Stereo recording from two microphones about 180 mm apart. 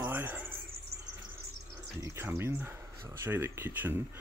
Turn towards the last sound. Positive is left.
turn(degrees=-15)  # may be behind; listen again after turning